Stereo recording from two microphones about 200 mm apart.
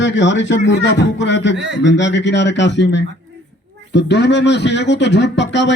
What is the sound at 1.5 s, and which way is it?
Speech, 65° right (ahead or behind).